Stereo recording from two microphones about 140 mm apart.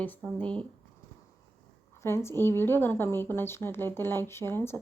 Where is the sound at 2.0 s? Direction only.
15° left (ahead or behind).